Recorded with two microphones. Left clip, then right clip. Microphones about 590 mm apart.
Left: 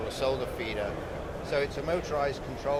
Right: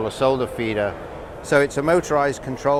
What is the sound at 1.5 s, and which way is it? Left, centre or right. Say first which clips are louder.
Speech: right 12 dB; right.